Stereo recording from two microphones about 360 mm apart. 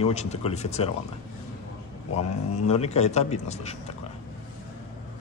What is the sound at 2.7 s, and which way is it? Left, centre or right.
Speech, centre.